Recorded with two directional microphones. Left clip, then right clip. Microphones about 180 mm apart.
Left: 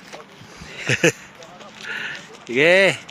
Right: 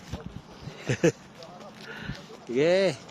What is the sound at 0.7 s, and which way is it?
Speech, centre (ahead or behind).